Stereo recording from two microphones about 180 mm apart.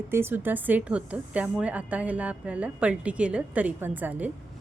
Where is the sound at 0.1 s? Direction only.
10° right (ahead or behind).